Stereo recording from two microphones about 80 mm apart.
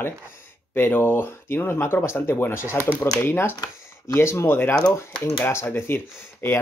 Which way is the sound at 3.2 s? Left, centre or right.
Left.